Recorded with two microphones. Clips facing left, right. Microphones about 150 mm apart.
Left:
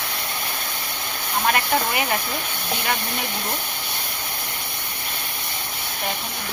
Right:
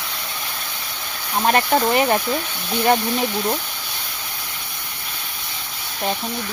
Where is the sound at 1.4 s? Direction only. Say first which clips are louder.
Right 5 dB; 35° right (ahead or behind).